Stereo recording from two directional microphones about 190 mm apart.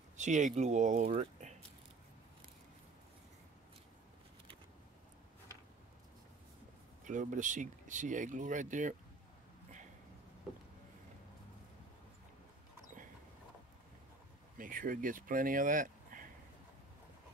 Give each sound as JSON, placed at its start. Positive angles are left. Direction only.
{"t": 0.2, "sound": "speech", "side_deg": -40}
{"t": 7.1, "sound": "speech", "side_deg": -40}
{"t": 14.6, "sound": "speech", "side_deg": -45}